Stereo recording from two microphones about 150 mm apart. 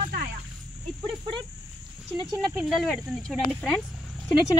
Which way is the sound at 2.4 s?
Centre (ahead or behind).